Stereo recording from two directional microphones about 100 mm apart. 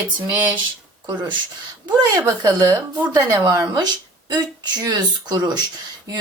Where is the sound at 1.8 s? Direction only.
40° right (ahead or behind).